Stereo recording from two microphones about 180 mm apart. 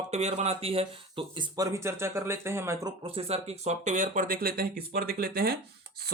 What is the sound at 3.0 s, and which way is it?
Speech, 30° right (ahead or behind).